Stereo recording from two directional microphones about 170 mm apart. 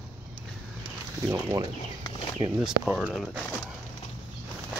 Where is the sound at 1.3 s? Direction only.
20° right (ahead or behind).